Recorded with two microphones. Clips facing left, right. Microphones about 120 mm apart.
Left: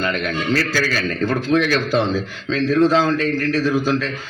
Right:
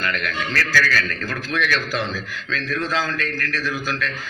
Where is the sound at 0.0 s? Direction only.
25° left (ahead or behind).